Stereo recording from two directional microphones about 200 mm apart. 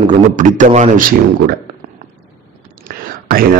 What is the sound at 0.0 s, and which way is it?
Speech, 40° right (ahead or behind).